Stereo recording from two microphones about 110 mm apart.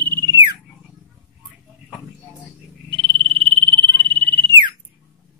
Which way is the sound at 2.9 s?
55° right (ahead or behind).